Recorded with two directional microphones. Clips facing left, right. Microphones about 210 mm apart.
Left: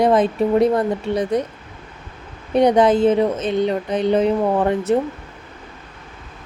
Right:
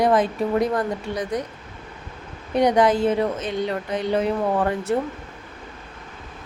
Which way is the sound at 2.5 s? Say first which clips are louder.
Left 4 dB; 25° left (ahead or behind).